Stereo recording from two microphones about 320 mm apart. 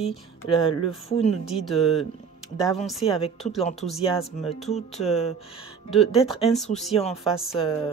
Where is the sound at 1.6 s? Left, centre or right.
Centre.